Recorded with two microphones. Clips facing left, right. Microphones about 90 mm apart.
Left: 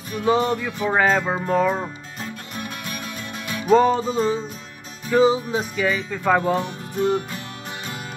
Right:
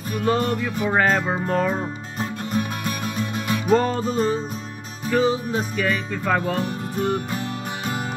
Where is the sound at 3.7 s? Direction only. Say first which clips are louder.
Left 4 dB; 10° left (ahead or behind).